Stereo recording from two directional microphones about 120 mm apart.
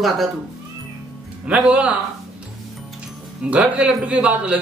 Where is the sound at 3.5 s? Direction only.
10° right (ahead or behind).